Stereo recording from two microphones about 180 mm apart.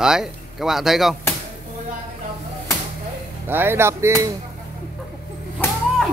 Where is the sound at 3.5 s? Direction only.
10° right (ahead or behind).